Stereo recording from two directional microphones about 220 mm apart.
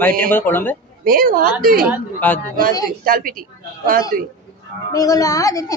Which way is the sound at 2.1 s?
10° left (ahead or behind).